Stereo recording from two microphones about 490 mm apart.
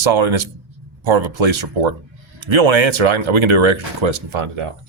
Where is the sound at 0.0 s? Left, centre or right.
Right.